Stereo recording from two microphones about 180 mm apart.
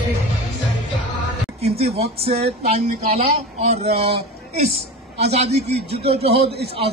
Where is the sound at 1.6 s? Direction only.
35° right (ahead or behind).